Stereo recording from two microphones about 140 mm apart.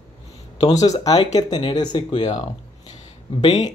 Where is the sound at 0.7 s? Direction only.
25° left (ahead or behind).